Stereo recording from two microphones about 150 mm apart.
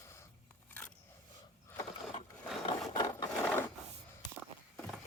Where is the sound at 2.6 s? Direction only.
25° left (ahead or behind).